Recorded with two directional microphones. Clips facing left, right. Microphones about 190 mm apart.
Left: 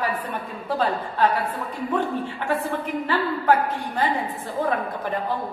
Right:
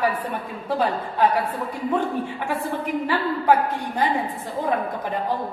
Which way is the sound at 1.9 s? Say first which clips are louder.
Right 1 dB; 15° right (ahead or behind).